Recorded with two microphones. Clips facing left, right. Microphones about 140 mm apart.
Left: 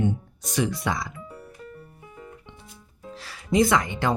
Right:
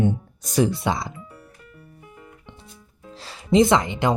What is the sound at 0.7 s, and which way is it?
Speech, 25° right (ahead or behind).